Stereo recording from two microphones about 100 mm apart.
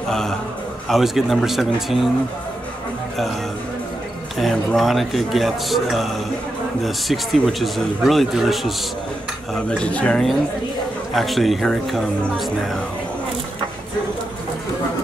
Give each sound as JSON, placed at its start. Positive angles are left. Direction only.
{"t": 0.1, "sound": "a man's voice", "side_deg": 5}
{"t": 4.4, "sound": "speech", "side_deg": 0}
{"t": 9.7, "sound": "speech", "side_deg": 10}
{"t": 11.1, "sound": "speech", "side_deg": 0}